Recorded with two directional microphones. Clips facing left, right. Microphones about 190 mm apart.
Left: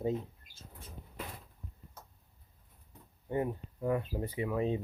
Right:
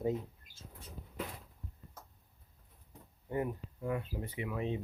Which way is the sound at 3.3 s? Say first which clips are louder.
Left 2 dB; 25° left (ahead or behind).